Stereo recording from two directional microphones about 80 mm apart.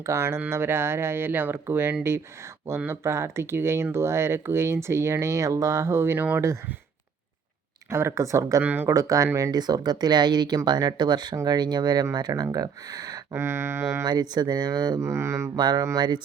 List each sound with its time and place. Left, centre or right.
0.0 s speech: right
7.9 s speech: right
8.6 s speech: right
8.9 s speech: right
9.5 s speech: right
13.3 s speech: right
14.0 s speech: right
15.0 s speech: right
15.5 s speech: right